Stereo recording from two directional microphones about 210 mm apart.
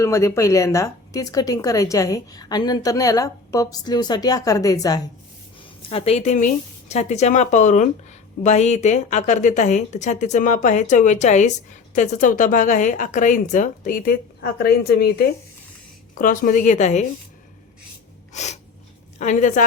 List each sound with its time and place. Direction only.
0.0 s speech: 15° left (ahead or behind)
5.9 s speech: 25° left (ahead or behind)
18.3 s speech: 35° left (ahead or behind)